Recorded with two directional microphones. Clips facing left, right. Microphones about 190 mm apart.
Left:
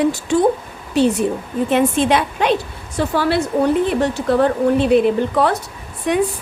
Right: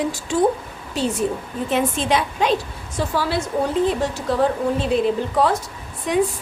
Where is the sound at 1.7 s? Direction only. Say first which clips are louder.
Left 4 dB; 60° left (ahead or behind).